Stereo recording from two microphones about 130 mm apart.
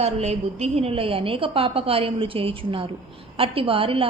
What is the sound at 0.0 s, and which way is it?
A woman's voice, 55° right (ahead or behind).